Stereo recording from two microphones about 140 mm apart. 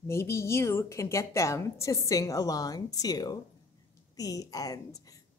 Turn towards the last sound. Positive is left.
turn(degrees=25)  # may be behind; listen again after turning